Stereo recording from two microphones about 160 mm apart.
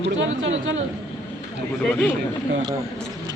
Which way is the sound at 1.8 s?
10° left (ahead or behind).